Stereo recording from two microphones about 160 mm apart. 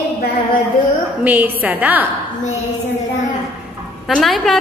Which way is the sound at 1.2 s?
10° right (ahead or behind).